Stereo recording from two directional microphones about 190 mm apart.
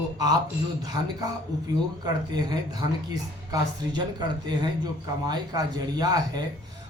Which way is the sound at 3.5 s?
20° right (ahead or behind).